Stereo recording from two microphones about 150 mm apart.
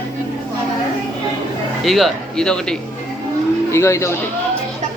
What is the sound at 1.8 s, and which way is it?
Speech, centre (ahead or behind).